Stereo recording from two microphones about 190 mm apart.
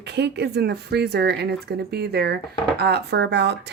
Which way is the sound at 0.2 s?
60° right (ahead or behind).